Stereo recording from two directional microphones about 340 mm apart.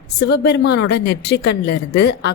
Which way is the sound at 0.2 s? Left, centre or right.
Left.